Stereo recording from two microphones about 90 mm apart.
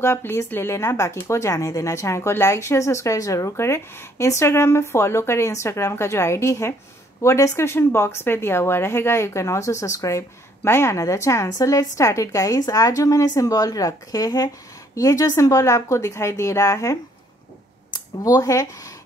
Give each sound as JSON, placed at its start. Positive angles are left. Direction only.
{"t": 0.0, "sound": "speech", "side_deg": 30}